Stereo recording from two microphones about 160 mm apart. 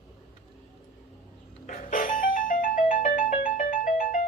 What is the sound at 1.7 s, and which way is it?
Music, 55° left (ahead or behind).